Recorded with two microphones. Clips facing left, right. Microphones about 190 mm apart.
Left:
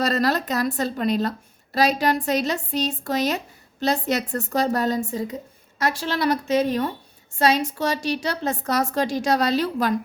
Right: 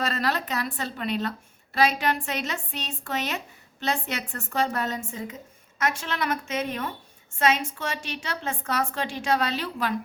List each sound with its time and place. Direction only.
0.0 s a woman's voice: 40° left (ahead or behind)